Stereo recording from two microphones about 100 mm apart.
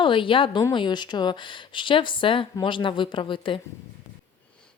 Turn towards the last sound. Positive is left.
turn(degrees=55)  # may be behind; listen again after turning